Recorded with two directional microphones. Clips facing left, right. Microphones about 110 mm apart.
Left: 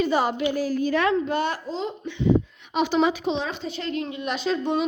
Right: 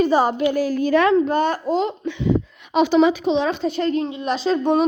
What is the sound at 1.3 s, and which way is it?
Speech, 40° right (ahead or behind).